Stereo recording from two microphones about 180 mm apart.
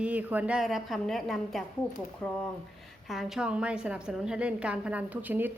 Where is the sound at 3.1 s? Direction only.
5° right (ahead or behind).